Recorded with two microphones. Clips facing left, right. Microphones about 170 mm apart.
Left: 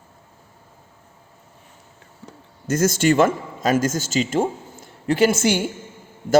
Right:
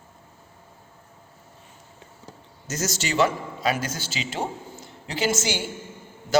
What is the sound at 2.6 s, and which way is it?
A man's voice, 55° left (ahead or behind).